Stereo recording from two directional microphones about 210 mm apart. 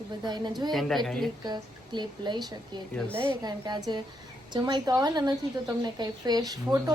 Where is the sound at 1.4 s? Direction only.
20° right (ahead or behind).